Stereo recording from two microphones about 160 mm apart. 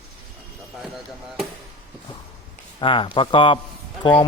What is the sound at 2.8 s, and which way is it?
A man's voice, 30° left (ahead or behind).